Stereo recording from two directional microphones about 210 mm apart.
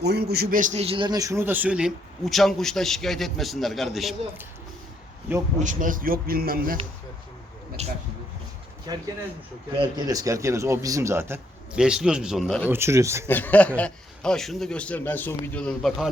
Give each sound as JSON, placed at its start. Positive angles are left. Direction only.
{"t": 0.0, "sound": "a man's voice", "side_deg": -50}
{"t": 5.5, "sound": "a man's voice", "side_deg": -40}
{"t": 7.8, "sound": "speech", "side_deg": -30}
{"t": 8.9, "sound": "a man's voice", "side_deg": -20}
{"t": 12.7, "sound": "a man's voice", "side_deg": -15}
{"t": 13.2, "sound": "a man's voice", "side_deg": 10}